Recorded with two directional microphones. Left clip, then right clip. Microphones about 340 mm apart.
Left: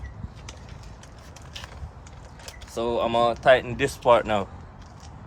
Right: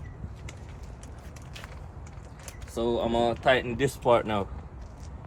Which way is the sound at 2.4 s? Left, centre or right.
Left.